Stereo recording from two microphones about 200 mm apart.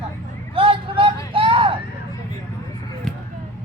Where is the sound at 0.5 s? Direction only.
25° right (ahead or behind).